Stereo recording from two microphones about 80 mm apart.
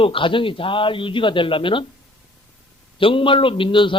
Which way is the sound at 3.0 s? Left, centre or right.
Left.